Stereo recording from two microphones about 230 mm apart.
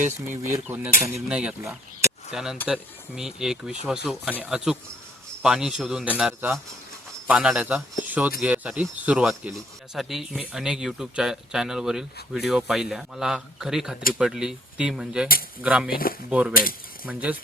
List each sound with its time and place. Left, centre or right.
0.3 s speech: centre
15.9 s speech: left
16.3 s speech: centre